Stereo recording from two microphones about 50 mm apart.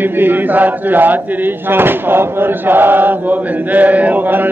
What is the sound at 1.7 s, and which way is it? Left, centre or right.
Chant, right.